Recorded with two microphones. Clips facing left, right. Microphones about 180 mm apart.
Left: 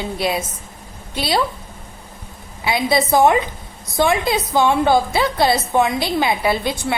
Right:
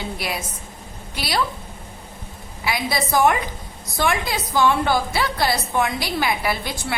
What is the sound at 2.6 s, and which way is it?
A woman's voice, 25° left (ahead or behind).